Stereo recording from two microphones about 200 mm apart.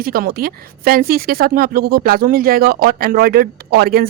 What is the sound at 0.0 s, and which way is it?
Speech, 45° right (ahead or behind).